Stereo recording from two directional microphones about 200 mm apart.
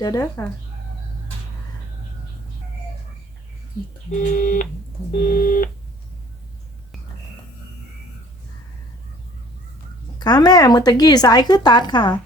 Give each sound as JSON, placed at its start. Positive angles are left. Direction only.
{"t": 0.0, "sound": "speech", "side_deg": 15}
{"t": 4.1, "sound": "speech", "side_deg": 40}
{"t": 5.3, "sound": "telephone dialing", "side_deg": 45}
{"t": 10.2, "sound": "a woman's voice", "side_deg": 20}